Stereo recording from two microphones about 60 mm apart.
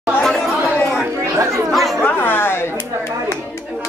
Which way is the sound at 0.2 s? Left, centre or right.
Centre.